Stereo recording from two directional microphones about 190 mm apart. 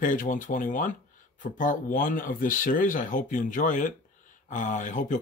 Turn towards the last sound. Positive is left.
turn(degrees=40)  # may be behind; listen again after turning